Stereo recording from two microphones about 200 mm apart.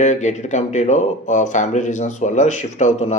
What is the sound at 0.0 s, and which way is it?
Speech, 35° left (ahead or behind).